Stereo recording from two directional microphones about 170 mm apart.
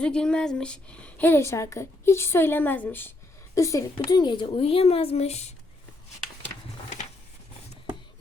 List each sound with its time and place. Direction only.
0.0 s a woman's voice: 5° left (ahead or behind); by 5.5 s 40° left (ahead or behind)